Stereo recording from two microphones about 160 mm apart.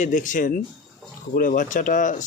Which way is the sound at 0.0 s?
50° left (ahead or behind).